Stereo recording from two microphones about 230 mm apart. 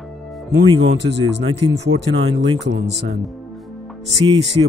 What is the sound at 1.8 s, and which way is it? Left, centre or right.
Speech, right.